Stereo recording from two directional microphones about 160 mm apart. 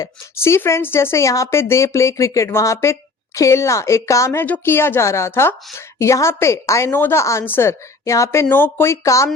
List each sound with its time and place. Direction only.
0.0 s speech: 15° left (ahead or behind)